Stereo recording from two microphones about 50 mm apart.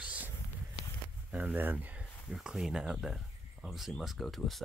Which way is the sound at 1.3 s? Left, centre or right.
Right.